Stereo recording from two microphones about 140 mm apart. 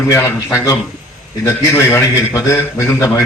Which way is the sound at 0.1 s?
20° left (ahead or behind).